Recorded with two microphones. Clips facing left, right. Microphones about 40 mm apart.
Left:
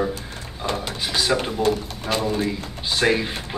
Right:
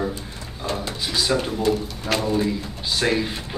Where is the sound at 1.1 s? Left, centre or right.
Centre.